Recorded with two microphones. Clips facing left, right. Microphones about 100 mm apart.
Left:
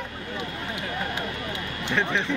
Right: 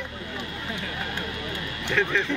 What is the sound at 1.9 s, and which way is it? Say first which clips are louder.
Speech: right 1 dB; 20° left (ahead or behind).